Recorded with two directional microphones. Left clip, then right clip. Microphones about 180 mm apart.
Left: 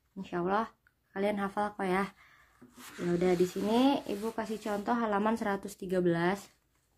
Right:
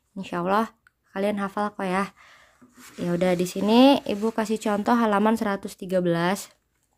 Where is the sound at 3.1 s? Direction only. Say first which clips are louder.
Right 5 dB; 50° right (ahead or behind).